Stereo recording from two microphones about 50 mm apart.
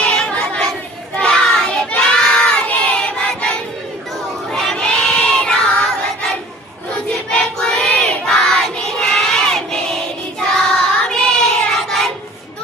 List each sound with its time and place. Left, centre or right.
0.0 s a sound: centre
1.2 s child singing: centre
1.9 s crowd: left
4.5 s choir: centre
7.3 s child singing: centre